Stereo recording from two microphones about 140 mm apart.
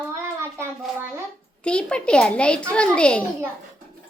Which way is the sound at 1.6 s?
5° left (ahead or behind).